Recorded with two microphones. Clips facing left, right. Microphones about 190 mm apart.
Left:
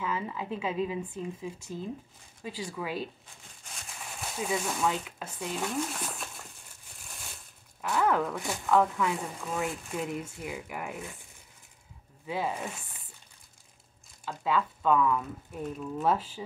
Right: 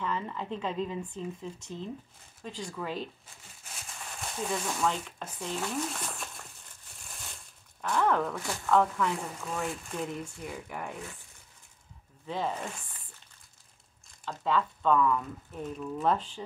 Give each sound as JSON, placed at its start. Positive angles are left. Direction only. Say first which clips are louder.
{"t": 0.0, "sound": "speech", "louder": "left 1 dB", "side_deg": 5}
{"t": 7.8, "sound": "speech", "louder": "even", "side_deg": 5}
{"t": 12.3, "sound": "speech", "louder": "left 1 dB", "side_deg": 10}
{"t": 14.2, "sound": "speech", "louder": "even", "side_deg": 5}